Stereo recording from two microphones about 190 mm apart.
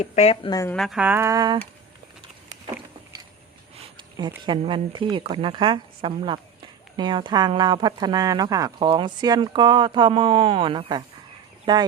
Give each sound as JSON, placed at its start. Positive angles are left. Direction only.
{"t": 0.0, "sound": "speech", "side_deg": 35}
{"t": 0.5, "sound": "speech", "side_deg": 15}
{"t": 0.8, "sound": "speech", "side_deg": -5}
{"t": 3.9, "sound": "speech", "side_deg": -25}